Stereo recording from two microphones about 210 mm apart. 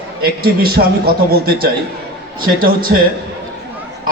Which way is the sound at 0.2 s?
45° right (ahead or behind).